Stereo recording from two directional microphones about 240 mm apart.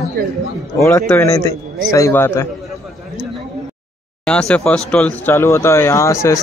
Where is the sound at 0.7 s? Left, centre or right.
Centre.